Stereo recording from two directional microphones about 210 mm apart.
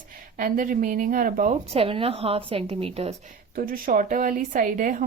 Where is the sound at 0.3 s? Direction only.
40° right (ahead or behind).